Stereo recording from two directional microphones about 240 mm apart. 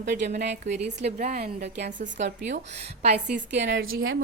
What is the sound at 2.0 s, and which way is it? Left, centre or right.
A woman's voice, right.